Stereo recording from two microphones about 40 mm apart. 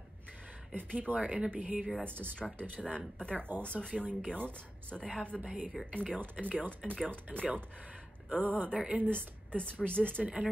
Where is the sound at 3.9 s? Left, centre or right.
Right.